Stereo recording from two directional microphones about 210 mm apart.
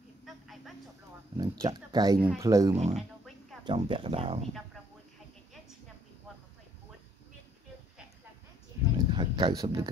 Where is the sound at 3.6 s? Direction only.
20° right (ahead or behind).